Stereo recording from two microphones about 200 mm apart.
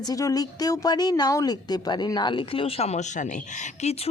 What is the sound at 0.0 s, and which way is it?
Speech, 15° left (ahead or behind).